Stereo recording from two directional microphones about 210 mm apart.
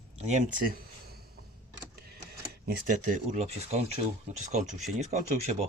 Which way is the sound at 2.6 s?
40° right (ahead or behind).